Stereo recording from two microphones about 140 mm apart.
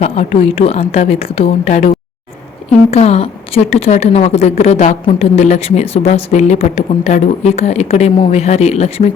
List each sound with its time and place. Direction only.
0.0 s a woman's voice: 50° left (ahead or behind)
2.9 s a woman's voice: 45° left (ahead or behind)